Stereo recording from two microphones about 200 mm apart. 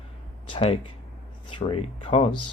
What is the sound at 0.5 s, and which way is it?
Speech, 25° left (ahead or behind).